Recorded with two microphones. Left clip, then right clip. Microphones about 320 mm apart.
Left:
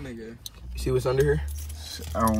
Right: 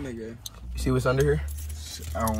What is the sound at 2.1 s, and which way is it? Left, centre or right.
Speech, left.